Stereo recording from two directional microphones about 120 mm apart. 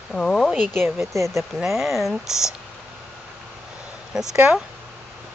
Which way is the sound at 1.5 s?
5° right (ahead or behind).